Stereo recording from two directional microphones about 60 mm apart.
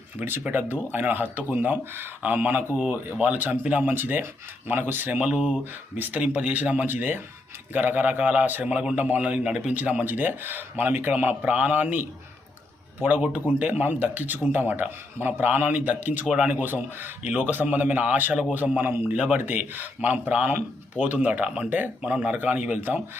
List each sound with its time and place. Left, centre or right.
0.2 s speech: right
16.2 s speech: centre
16.5 s speech: right
18.8 s speech: right
19.1 s speech: right
19.4 s speech: right